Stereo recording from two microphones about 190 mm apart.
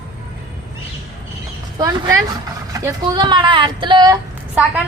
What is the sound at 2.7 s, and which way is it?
Speech, 20° right (ahead or behind).